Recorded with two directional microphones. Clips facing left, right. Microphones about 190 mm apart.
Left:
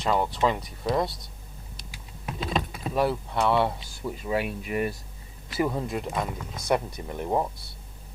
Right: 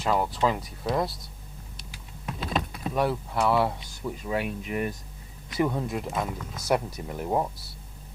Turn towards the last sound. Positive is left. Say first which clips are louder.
# even
turn(degrees=0)  # may be behind; listen again after turning